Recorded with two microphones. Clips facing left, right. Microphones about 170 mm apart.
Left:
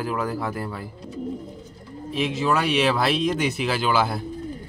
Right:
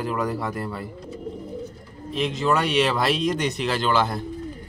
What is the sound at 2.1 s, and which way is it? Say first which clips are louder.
Speech: even; 5° left (ahead or behind).